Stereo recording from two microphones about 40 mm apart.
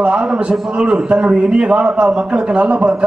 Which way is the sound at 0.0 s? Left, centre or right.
Right.